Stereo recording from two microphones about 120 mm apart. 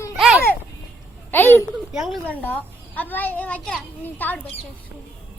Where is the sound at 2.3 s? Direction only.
15° left (ahead or behind).